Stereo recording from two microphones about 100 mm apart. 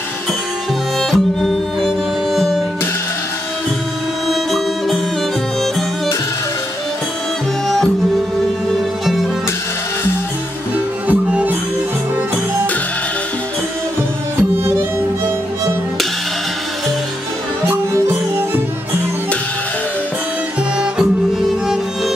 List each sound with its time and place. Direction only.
0.9 s music: 5° left (ahead or behind)
4.3 s music: centre (ahead or behind)
7.6 s music: 5° left (ahead or behind)
11.1 s music: 15° right (ahead or behind)
14.6 s music: 25° right (ahead or behind)
17.6 s music: 25° right (ahead or behind)